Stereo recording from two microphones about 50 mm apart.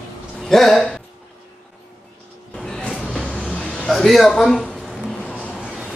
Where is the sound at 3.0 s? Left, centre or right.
Centre.